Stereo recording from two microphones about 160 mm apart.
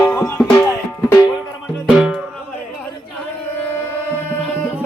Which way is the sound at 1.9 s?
5° right (ahead or behind).